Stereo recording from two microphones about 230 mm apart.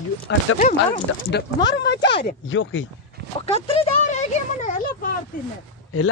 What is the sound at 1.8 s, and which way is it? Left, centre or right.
Speech, left.